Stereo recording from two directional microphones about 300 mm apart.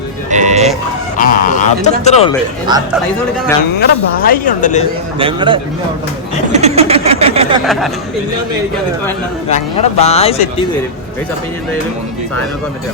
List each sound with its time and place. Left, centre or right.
0.3 s music: right
1.2 s speech: left
3.8 s speech: left
5.2 s a man's voice: centre
6.5 s a sound: right
7.6 s speech: centre
9.5 s speech: left